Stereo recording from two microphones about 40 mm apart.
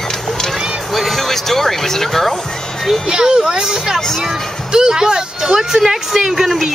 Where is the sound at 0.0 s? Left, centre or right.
Centre.